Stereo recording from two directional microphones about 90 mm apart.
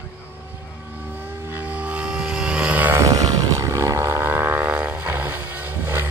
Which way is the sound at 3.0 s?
40° right (ahead or behind).